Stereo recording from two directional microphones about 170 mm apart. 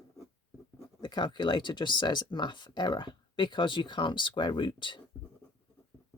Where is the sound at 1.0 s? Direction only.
25° left (ahead or behind).